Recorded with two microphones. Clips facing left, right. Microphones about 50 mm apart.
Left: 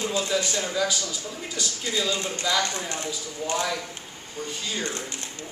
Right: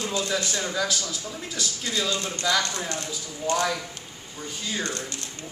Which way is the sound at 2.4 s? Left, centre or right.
Centre.